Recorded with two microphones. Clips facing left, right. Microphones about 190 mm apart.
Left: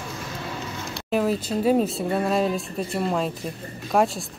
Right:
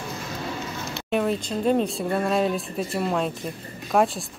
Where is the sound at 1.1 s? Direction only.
Centre (ahead or behind).